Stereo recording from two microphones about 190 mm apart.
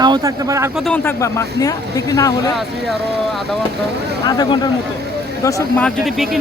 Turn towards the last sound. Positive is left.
turn(degrees=0)  # may be behind; listen again after turning